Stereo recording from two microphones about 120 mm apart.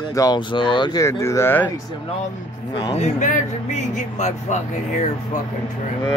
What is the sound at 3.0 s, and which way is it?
Speech, 80° left.